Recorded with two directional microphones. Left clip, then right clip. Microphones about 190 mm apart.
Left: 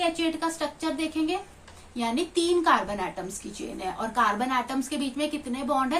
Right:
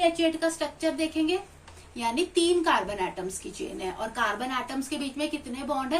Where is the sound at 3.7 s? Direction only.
35° left (ahead or behind).